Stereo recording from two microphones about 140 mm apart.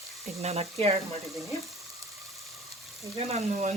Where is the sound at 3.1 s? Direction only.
55° right (ahead or behind).